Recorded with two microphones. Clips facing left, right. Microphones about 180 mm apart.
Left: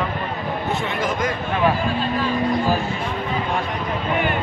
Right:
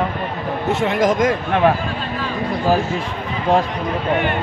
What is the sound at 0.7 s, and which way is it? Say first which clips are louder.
Speech: right 9 dB; 90° right.